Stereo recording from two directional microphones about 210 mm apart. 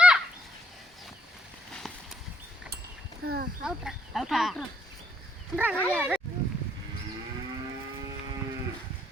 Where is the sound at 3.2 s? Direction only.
45° right (ahead or behind).